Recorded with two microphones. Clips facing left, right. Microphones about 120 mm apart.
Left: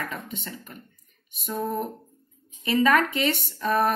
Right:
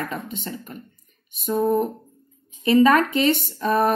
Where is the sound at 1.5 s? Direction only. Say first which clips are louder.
Right 8 dB; 40° right (ahead or behind).